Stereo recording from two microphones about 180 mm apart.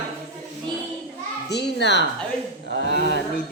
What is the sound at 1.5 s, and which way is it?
A man's voice, 70° left (ahead or behind).